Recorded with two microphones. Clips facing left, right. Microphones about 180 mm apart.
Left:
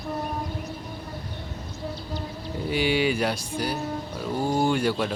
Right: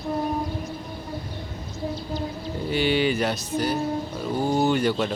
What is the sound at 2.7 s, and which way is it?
Speech, 10° left (ahead or behind).